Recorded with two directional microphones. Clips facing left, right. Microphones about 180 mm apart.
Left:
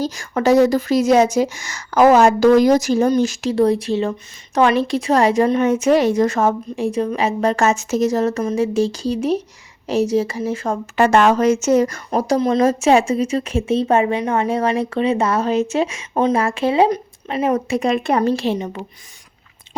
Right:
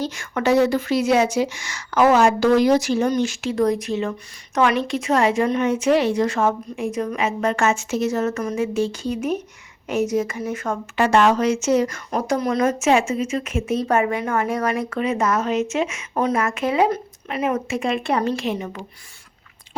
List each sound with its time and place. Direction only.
0.0 s speech: 35° left (ahead or behind)
10.9 s speech: 45° left (ahead or behind)
18.5 s speech: 25° left (ahead or behind)